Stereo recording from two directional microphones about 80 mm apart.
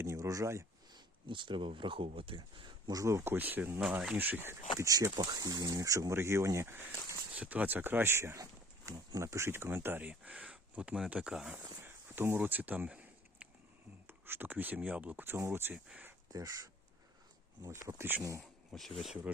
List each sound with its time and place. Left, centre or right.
0.0 s a sound: right
0.9 s speech: right
2.9 s speech: right
3.3 s speech: right
4.8 s speech: right
7.3 s speech: centre
11.6 s a sound: right
14.1 s speech: right
15.7 s speech: centre
17.6 s speech: right
18.2 s speech: right
18.7 s speech: centre